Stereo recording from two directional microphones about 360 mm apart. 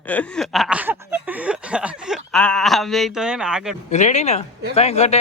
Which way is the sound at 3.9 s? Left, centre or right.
Centre.